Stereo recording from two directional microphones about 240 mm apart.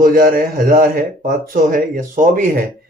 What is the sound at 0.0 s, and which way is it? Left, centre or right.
Speech, right.